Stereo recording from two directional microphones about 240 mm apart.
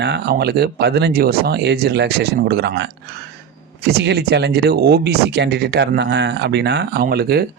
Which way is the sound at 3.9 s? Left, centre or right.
Right.